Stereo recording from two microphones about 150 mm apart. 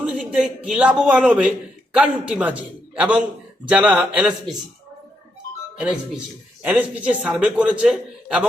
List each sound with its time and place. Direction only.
0.0 s a man's voice: 5° right (ahead or behind)
5.8 s a man's voice: 10° right (ahead or behind)